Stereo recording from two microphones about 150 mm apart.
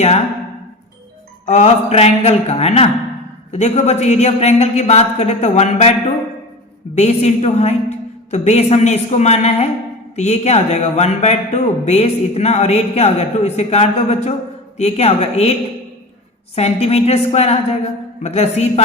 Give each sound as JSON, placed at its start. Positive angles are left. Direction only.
{"t": 1.5, "sound": "a man's voice", "side_deg": 45}
{"t": 6.9, "sound": "a man's voice", "side_deg": 45}
{"t": 16.6, "sound": "a man's voice", "side_deg": 45}